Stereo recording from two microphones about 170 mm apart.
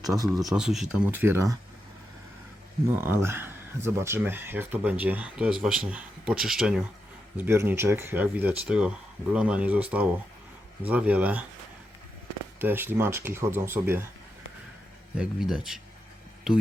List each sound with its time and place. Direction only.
0.0 s speech: 20° right (ahead or behind)
0.5 s speech: centre (ahead or behind)
3.0 s speech: 15° right (ahead or behind)
7.3 s speech: 15° right (ahead or behind)
12.5 s speech: 10° right (ahead or behind)
15.2 s speech: 5° right (ahead or behind)